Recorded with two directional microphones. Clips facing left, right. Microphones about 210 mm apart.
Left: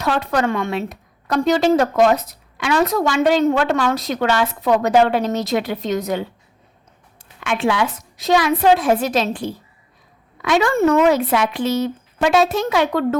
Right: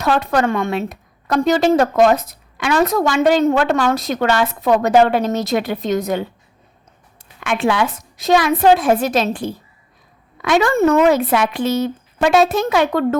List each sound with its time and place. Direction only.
0.0 s a woman's voice: 50° right (ahead or behind)
7.4 s a woman's voice: 50° right (ahead or behind)